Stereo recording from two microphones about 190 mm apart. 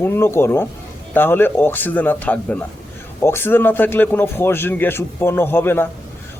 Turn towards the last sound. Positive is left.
turn(degrees=10)  # may be behind; listen again after turning